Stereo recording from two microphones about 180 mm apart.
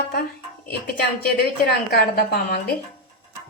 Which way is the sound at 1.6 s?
65° left (ahead or behind).